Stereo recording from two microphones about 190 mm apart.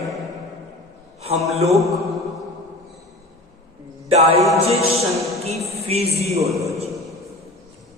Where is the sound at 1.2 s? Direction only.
35° right (ahead or behind).